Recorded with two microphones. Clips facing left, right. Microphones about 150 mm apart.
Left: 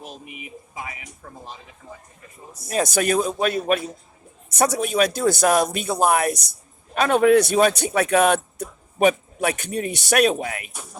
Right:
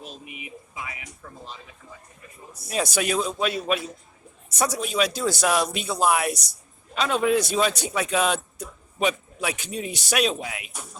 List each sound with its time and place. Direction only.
0.0 s speech: 45° left (ahead or behind)
2.5 s speech: 45° left (ahead or behind)